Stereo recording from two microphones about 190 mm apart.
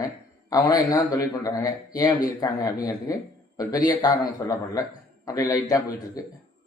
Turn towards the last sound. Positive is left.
turn(degrees=20)  # may be behind; listen again after turning